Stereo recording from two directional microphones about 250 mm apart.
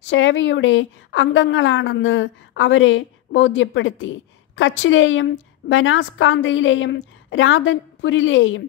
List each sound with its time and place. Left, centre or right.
0.0 s a woman's voice: left